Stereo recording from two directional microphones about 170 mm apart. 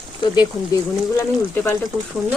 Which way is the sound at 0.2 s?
25° left (ahead or behind).